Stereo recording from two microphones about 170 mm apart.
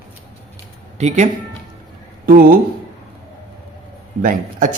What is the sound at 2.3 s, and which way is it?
Speech, 60° right (ahead or behind).